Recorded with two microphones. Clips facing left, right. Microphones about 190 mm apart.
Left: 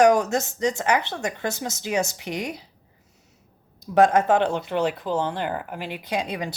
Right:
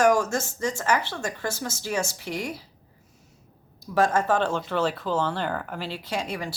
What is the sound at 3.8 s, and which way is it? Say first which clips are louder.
Speech: left 5 dB; 20° left (ahead or behind).